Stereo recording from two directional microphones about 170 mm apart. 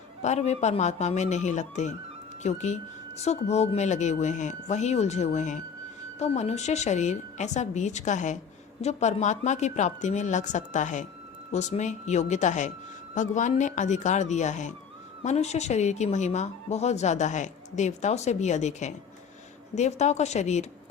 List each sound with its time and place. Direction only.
0.2 s speech: 40° left (ahead or behind)